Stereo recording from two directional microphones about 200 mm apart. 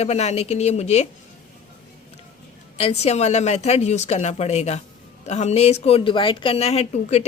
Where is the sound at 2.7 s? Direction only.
30° left (ahead or behind).